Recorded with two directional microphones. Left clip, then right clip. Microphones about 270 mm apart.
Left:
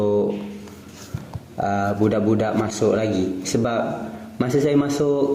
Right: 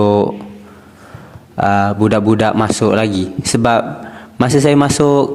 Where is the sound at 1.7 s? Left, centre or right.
Right.